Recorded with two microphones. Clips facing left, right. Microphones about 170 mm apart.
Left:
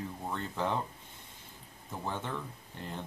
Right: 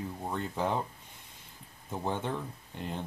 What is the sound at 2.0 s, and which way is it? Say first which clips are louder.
Speech: right 4 dB; 20° right (ahead or behind).